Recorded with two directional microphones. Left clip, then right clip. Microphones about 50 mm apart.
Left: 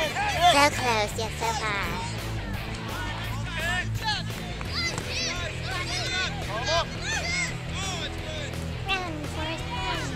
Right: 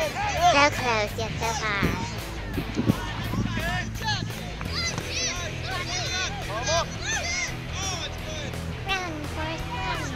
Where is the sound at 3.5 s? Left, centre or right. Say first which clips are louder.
Left 4 dB; left.